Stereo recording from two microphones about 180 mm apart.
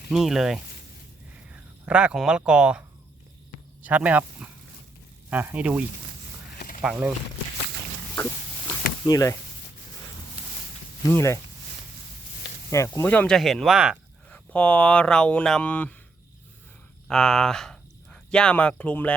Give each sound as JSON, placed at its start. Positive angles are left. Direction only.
{"t": 0.1, "sound": "speech", "side_deg": 0}
{"t": 1.8, "sound": "speech", "side_deg": -5}
{"t": 3.8, "sound": "speech", "side_deg": -10}
{"t": 6.8, "sound": "speech", "side_deg": -5}
{"t": 9.0, "sound": "speech", "side_deg": 20}
{"t": 11.0, "sound": "speech", "side_deg": 15}
{"t": 12.7, "sound": "speech", "side_deg": 15}
{"t": 14.3, "sound": "speech", "side_deg": 5}
{"t": 17.1, "sound": "speech", "side_deg": 5}